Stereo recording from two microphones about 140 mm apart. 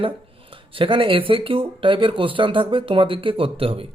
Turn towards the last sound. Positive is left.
turn(degrees=-40)  # may be behind; listen again after turning